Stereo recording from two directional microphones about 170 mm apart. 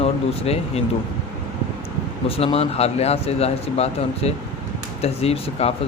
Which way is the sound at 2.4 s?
35° left (ahead or behind).